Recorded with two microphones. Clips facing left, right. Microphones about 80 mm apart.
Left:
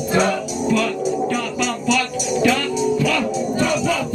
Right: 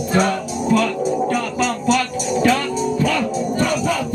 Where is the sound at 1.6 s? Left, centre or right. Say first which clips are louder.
Right 2 dB; right.